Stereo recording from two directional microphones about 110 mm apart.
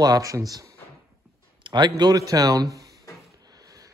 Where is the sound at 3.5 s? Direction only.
30° right (ahead or behind).